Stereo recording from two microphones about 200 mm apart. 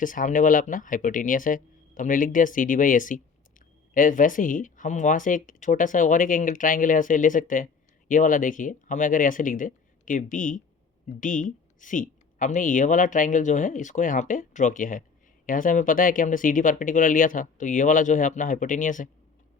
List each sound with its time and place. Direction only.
0.0 s speech: 40° left (ahead or behind)